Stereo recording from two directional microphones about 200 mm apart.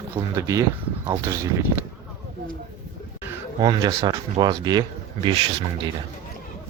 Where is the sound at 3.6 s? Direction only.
25° right (ahead or behind).